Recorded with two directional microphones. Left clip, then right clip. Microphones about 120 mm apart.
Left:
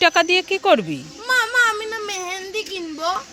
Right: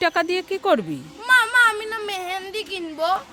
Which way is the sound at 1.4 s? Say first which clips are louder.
Left 2 dB; 35° right (ahead or behind).